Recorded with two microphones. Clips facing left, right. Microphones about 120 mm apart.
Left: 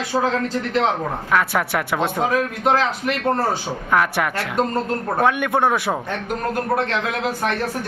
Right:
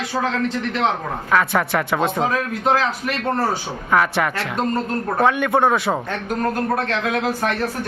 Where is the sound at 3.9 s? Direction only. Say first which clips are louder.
Right 1 dB; 5° left (ahead or behind).